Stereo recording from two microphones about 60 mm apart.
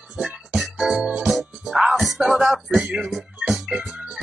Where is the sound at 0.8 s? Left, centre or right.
Centre.